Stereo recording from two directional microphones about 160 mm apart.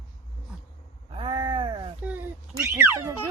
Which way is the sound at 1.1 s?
35° right (ahead or behind).